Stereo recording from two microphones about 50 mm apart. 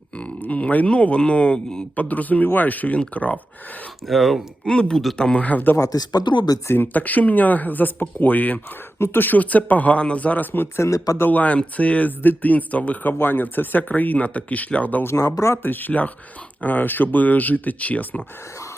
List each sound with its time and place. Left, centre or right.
0.4 s speech: left
2.0 s speech: left
4.1 s speech: centre
4.6 s speech: centre
5.4 s speech: left
6.7 s speech: left
10.8 s speech: left
11.3 s speech: left
15.0 s speech: left
15.6 s speech: left